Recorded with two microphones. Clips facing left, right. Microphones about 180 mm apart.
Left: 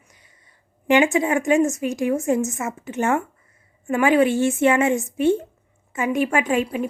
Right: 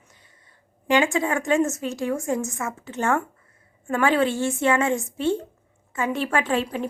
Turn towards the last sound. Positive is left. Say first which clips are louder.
# left 3 dB
turn(degrees=10)  # may be behind; listen again after turning